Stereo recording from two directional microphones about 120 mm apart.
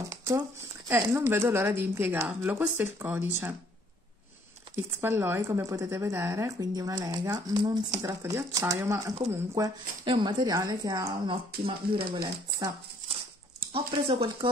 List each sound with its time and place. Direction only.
0.4 s speech: 20° right (ahead or behind)
4.7 s speech: 20° right (ahead or behind); by 8.1 s 35° right (ahead or behind)
8.1 s speech: 25° right (ahead or behind)
10.0 s a woman's voice: 40° right (ahead or behind)
11.6 s speech: 45° right (ahead or behind)
13.7 s speech: 50° right (ahead or behind)